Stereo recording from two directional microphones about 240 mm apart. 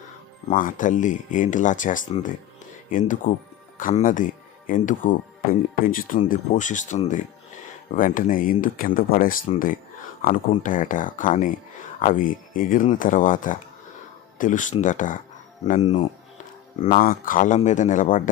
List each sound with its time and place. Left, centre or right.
0.5 s speech: left